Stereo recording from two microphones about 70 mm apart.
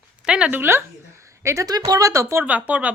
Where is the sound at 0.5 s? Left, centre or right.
Right.